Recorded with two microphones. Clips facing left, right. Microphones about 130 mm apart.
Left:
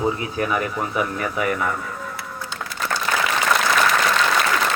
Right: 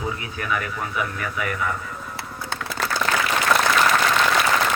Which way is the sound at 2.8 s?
75° right (ahead or behind).